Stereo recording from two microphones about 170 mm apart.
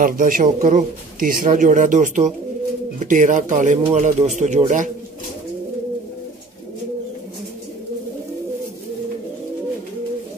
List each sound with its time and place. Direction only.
0.0 s speech: 55° right (ahead or behind)